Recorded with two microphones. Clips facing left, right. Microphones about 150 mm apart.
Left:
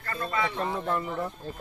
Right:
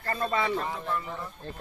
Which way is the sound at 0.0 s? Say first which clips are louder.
Right 2 dB; 35° right (ahead or behind).